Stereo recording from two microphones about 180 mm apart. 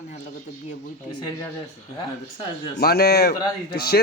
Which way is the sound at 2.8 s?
60° left (ahead or behind).